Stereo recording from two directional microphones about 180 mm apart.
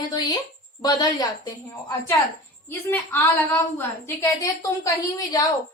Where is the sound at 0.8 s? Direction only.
20° left (ahead or behind).